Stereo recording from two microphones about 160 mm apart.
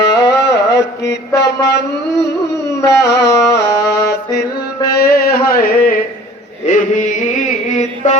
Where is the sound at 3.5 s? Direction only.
90° left.